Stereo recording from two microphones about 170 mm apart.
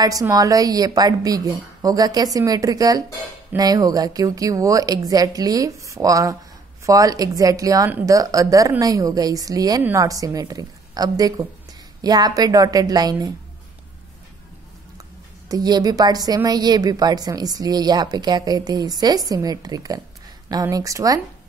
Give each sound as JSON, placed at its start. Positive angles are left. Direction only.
{"t": 0.0, "sound": "a woman's voice", "side_deg": -20}
{"t": 15.4, "sound": "a woman's voice", "side_deg": -20}